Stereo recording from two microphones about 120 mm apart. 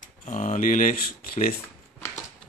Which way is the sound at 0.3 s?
90° left.